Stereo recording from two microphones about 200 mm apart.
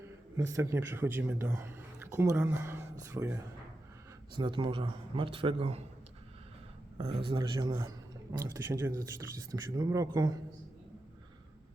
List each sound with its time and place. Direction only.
0.0 s a man's voice: 15° right (ahead or behind)
7.3 s a man's voice: 20° right (ahead or behind)